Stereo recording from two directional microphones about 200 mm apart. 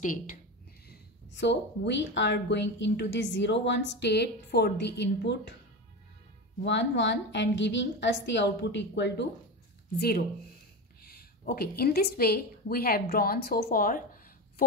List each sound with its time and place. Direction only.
0.0 s speech: 40° left (ahead or behind)
0.8 s speech: 60° left (ahead or behind)
6.6 s a woman's voice: 60° left (ahead or behind); by 14.2 s 45° left (ahead or behind)